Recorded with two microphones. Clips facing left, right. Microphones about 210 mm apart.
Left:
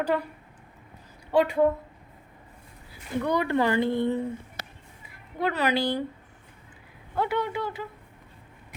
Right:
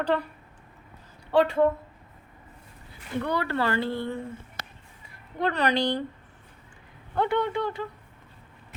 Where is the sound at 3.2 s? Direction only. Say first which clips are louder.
Left 3 dB; 15° left (ahead or behind).